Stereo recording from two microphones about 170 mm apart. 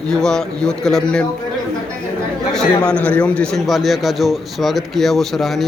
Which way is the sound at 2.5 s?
5° left (ahead or behind).